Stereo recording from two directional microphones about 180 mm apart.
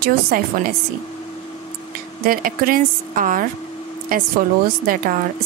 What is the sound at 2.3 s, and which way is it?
Speech, 50° right (ahead or behind).